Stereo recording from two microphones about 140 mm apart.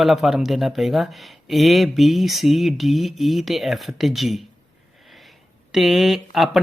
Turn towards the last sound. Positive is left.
turn(degrees=0)  # may be behind; listen again after turning